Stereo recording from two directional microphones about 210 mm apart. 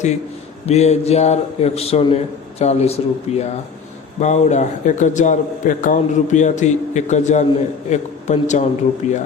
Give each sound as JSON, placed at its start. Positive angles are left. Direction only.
{"t": 0.6, "sound": "a man's voice", "side_deg": 30}